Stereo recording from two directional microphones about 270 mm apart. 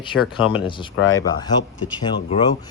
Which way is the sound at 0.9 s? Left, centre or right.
Left.